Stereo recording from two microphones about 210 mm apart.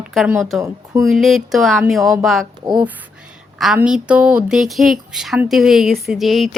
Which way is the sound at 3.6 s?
5° right (ahead or behind).